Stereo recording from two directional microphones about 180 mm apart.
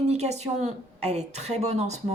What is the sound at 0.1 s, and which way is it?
A woman's voice, 35° right (ahead or behind).